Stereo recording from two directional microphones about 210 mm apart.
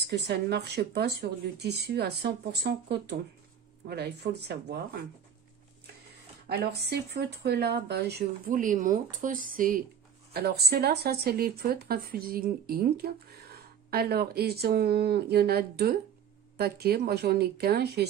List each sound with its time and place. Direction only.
0.1 s speech: 50° right (ahead or behind)
6.9 s speech: 50° right (ahead or behind)